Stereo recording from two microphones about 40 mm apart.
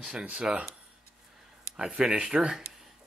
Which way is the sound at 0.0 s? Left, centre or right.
Right.